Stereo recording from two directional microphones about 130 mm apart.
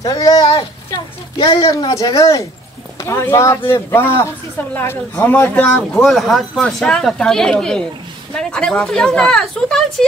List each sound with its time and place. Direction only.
0.0 s speech: 25° left (ahead or behind)
1.6 s speech: 30° left (ahead or behind)
6.0 s speech: centre (ahead or behind)